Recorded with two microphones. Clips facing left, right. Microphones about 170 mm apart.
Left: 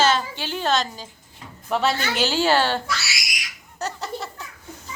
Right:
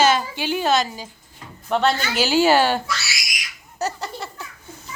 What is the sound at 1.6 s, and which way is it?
A woman's voice, centre (ahead or behind).